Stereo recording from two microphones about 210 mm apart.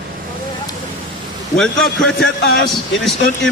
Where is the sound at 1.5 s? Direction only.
5° left (ahead or behind).